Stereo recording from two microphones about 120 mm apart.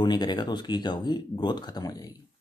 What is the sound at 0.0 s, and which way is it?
Speech, 35° left (ahead or behind).